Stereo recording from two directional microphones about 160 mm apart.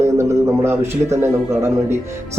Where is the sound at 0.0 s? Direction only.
15° right (ahead or behind).